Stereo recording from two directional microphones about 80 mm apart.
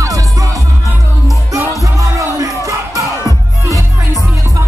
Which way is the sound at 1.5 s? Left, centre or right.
Right.